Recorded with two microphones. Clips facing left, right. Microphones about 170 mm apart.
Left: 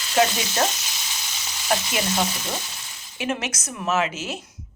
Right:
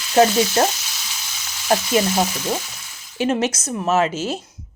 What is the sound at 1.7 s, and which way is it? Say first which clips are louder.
Speech: right 5 dB; 40° right (ahead or behind).